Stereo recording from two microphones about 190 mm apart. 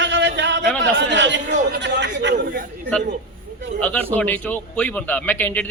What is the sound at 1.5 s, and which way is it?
Speech, 40° right (ahead or behind).